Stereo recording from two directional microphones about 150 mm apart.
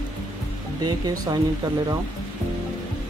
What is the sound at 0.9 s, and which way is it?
Speech, 25° right (ahead or behind).